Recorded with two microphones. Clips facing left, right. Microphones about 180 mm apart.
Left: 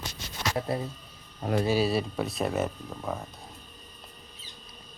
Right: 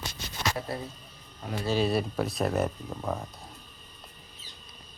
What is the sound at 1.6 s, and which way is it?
Speech, 5° left (ahead or behind).